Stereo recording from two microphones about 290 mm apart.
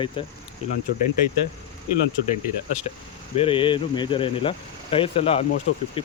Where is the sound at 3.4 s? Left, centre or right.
Centre.